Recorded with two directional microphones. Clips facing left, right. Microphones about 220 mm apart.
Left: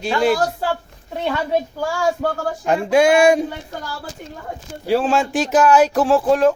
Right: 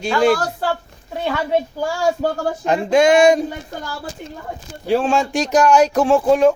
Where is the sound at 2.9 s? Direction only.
10° left (ahead or behind).